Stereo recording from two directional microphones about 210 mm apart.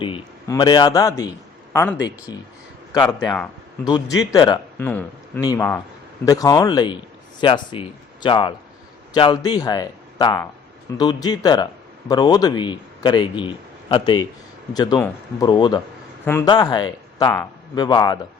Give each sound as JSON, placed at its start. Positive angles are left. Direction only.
{"t": 0.0, "sound": "a man's voice", "side_deg": 20}